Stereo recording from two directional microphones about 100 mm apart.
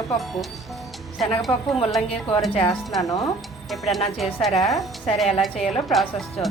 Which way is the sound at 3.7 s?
Centre (ahead or behind).